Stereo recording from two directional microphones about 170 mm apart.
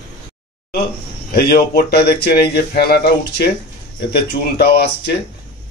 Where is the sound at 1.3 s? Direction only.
65° left (ahead or behind).